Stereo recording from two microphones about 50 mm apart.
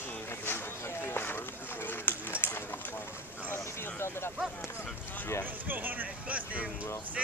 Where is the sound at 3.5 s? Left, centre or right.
Left.